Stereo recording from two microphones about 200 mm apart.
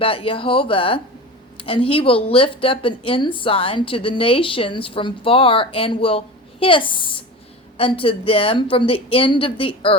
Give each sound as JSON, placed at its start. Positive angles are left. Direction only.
{"t": 0.0, "sound": "speech", "side_deg": 25}